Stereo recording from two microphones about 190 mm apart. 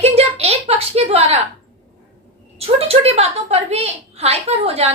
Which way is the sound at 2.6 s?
30° right (ahead or behind).